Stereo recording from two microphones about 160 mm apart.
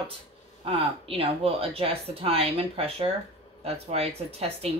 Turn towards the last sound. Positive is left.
turn(degrees=-40)  # may be behind; listen again after turning